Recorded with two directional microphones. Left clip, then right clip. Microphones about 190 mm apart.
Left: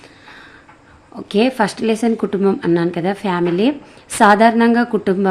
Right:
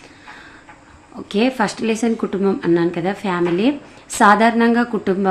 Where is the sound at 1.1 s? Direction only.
30° left (ahead or behind).